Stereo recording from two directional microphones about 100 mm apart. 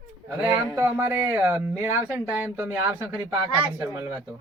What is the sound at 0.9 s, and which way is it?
Speech, 20° right (ahead or behind).